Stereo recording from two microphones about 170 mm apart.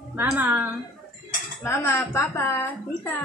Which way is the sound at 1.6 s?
15° left (ahead or behind).